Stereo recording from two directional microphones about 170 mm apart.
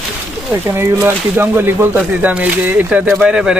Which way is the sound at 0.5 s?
10° right (ahead or behind).